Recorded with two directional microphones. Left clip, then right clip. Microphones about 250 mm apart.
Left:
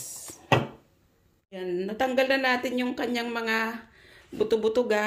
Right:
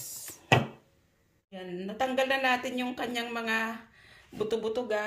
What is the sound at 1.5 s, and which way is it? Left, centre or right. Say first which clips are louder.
A woman's voice: left 8 dB; left.